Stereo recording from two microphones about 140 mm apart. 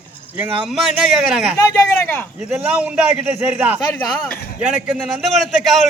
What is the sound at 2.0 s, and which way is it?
Speech, 10° left (ahead or behind).